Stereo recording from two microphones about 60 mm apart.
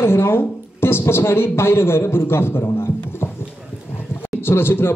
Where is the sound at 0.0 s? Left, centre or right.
Left.